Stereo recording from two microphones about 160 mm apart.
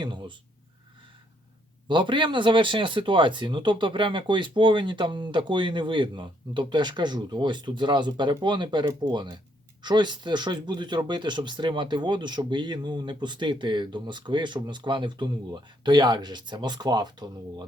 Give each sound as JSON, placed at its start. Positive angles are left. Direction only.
{"t": 0.0, "sound": "speech", "side_deg": -30}
{"t": 1.9, "sound": "speech", "side_deg": -30}